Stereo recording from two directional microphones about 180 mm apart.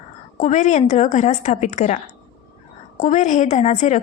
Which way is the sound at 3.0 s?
40° left (ahead or behind).